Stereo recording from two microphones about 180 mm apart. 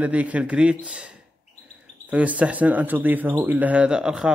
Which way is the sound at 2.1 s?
10° right (ahead or behind).